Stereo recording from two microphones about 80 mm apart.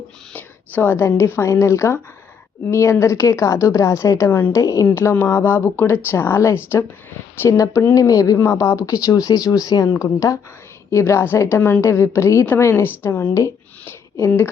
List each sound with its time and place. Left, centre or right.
0.3 s a woman's voice: left
4.3 s a woman's voice: left
4.5 s speech: left
5.3 s a woman's voice: left
13.8 s a sound: left